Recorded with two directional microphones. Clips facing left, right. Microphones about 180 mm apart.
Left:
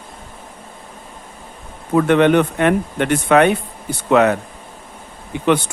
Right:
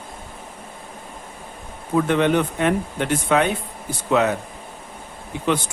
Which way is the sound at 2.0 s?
65° left (ahead or behind).